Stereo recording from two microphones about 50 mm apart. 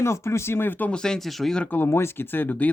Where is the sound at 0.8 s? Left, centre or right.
Centre.